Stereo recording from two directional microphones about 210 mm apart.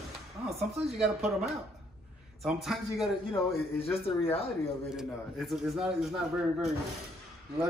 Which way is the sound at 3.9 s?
25° left (ahead or behind).